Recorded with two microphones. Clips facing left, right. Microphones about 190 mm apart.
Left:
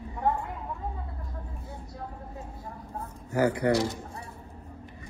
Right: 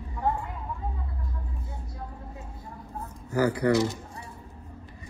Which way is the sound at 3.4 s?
20° left (ahead or behind).